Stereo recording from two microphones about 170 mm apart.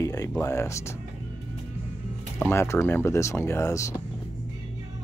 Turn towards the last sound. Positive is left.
turn(degrees=20)  # may be behind; listen again after turning